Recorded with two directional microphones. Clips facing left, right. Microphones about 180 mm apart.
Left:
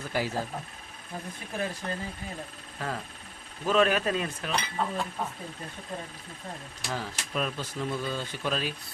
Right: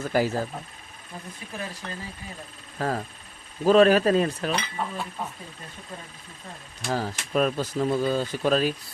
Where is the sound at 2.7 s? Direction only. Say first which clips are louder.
Right 7 dB; 40° right (ahead or behind).